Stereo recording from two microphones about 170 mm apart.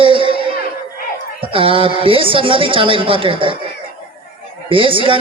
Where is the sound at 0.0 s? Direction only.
30° right (ahead or behind).